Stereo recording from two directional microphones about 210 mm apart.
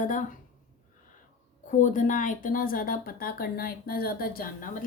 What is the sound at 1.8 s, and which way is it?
A woman's voice, 40° left (ahead or behind).